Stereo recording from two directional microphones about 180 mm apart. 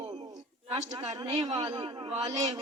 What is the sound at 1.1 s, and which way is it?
A man's voice, 30° right (ahead or behind).